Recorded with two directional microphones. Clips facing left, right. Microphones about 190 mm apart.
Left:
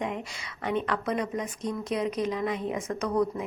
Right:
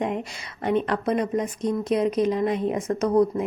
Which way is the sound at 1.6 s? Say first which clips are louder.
Right 6 dB; 20° right (ahead or behind).